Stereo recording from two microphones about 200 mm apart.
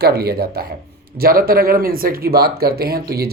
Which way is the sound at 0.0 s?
50° right (ahead or behind).